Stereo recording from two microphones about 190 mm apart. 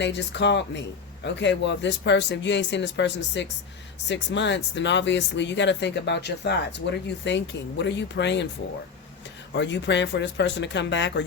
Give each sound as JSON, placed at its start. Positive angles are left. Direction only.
{"t": 0.0, "sound": "speech", "side_deg": 65}
{"t": 9.5, "sound": "speech", "side_deg": 65}